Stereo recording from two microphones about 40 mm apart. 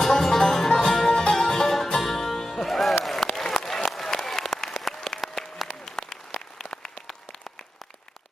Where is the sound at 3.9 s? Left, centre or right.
Centre.